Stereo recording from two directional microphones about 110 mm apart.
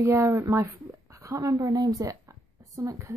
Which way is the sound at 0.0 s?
25° right (ahead or behind).